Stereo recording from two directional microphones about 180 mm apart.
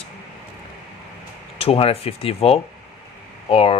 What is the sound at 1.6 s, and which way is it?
Speech, 30° left (ahead or behind).